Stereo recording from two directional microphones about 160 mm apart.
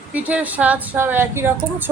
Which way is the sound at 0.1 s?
10° right (ahead or behind).